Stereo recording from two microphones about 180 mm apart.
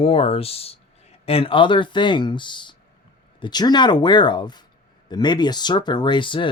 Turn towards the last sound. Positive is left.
turn(degrees=30)  # may be behind; listen again after turning